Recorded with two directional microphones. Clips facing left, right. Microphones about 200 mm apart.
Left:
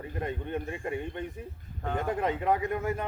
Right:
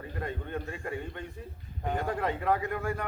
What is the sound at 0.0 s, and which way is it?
A man's voice, 20° left (ahead or behind).